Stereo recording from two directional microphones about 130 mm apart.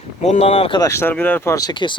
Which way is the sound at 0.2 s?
55° left (ahead or behind).